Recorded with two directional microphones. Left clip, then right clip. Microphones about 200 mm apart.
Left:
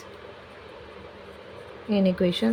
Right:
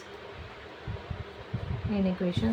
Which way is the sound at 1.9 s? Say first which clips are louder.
Left 8 dB; 40° left (ahead or behind).